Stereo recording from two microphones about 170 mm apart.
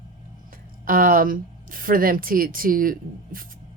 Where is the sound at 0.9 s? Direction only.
55° right (ahead or behind).